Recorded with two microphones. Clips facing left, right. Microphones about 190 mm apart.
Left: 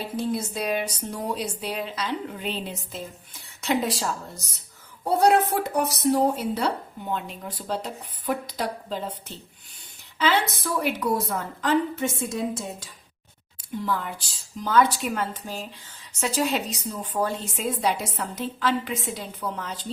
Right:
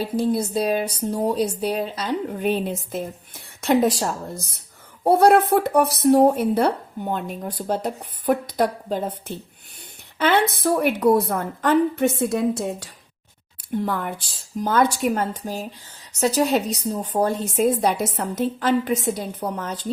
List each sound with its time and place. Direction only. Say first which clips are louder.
0.2 s a woman's voice: right 6 dB; 35° right (ahead or behind)